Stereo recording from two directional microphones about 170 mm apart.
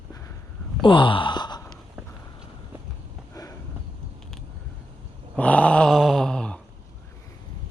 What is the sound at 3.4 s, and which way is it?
Sniff, 20° left (ahead or behind).